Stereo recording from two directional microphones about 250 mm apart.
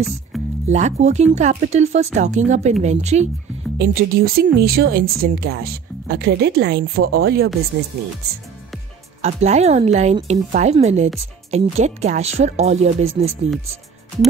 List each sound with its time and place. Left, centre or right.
0.3 s music: centre
0.7 s speech: right
3.7 s speech: right
9.2 s speech: right